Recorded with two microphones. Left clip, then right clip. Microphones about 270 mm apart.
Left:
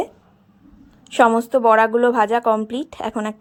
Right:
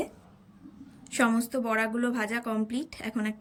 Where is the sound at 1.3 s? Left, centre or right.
Left.